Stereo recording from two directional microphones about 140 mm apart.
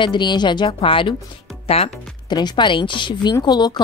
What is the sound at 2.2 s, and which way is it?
Speech, 30° left (ahead or behind).